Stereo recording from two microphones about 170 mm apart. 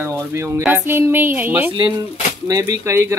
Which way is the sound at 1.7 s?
25° right (ahead or behind).